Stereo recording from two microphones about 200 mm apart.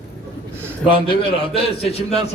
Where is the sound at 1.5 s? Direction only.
30° left (ahead or behind).